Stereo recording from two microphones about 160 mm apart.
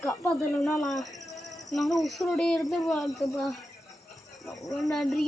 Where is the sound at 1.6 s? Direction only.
Centre (ahead or behind).